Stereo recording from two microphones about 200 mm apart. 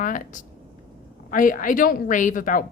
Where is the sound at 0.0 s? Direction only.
40° left (ahead or behind).